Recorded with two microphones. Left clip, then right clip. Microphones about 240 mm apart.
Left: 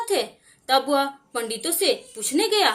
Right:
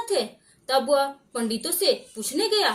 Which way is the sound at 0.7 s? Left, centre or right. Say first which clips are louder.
Left 1 dB; left.